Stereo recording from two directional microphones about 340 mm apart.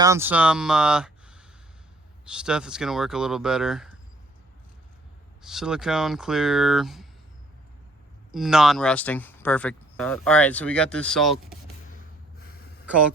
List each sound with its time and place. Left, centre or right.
0.0 s speech: centre
5.4 s speech: centre
8.3 s speech: centre
12.4 s a sound: left